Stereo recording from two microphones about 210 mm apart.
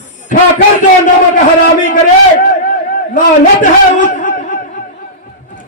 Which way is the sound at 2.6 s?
40° left (ahead or behind).